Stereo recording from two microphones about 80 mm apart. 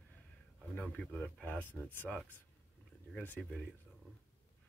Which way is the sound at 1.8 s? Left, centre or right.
Centre.